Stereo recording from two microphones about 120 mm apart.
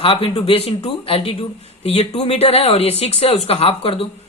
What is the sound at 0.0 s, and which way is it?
A man's voice, 50° left (ahead or behind).